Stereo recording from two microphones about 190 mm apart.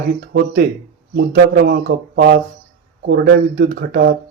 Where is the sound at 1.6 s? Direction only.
60° right (ahead or behind).